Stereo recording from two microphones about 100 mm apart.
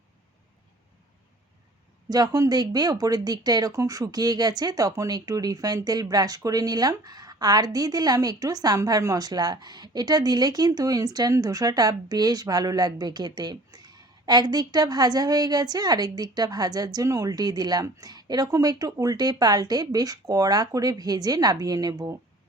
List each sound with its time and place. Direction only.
2.0 s speech: 40° right (ahead or behind)